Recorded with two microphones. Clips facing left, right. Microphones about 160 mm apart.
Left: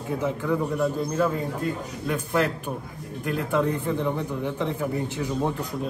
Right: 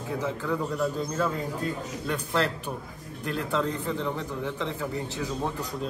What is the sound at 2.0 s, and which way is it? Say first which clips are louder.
A man's voice: left 3 dB; 10° left (ahead or behind).